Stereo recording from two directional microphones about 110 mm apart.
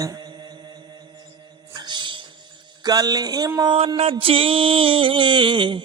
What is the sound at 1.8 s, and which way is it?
Music, 45° right (ahead or behind).